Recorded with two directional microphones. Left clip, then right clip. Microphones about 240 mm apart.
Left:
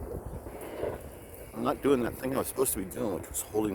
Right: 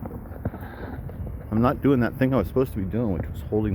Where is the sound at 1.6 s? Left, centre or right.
Centre.